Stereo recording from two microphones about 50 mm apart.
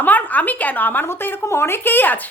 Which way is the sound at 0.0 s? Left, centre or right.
Left.